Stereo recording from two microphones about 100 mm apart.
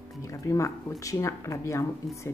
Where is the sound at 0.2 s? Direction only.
30° left (ahead or behind).